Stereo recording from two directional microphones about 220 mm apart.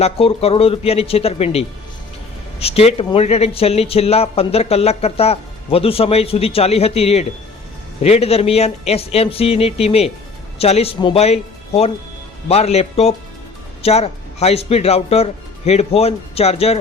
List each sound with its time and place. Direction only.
0.0 s a man's voice: 25° left (ahead or behind)